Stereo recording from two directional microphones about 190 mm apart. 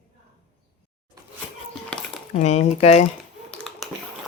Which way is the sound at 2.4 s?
35° left (ahead or behind).